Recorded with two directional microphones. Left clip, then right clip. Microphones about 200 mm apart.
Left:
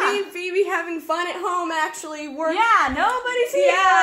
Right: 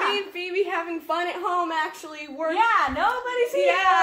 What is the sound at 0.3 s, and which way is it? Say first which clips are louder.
A woman's voice: left 4 dB; 20° left (ahead or behind).